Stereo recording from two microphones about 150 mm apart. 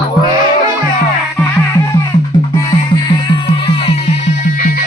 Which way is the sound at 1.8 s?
25° left (ahead or behind).